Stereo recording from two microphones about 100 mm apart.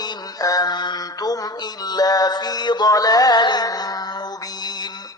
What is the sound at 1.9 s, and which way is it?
Mantra, 40° left (ahead or behind).